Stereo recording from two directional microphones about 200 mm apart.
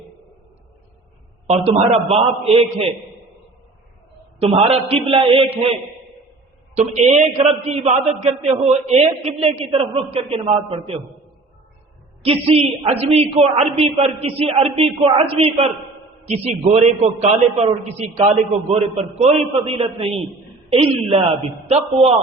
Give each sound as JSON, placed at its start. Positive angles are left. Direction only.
{"t": 1.5, "sound": "a man's voice", "side_deg": -30}
{"t": 4.4, "sound": "a woman's voice", "side_deg": -30}
{"t": 6.7, "sound": "a man's voice", "side_deg": -35}
{"t": 12.2, "sound": "a woman's voice", "side_deg": -30}